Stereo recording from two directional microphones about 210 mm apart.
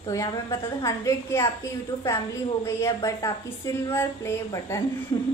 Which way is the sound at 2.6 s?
10° left (ahead or behind).